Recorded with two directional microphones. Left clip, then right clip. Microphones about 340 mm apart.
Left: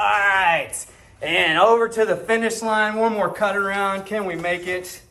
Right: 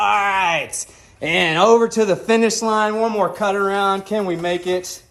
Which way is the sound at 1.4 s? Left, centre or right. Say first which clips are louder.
Right 2 dB; centre.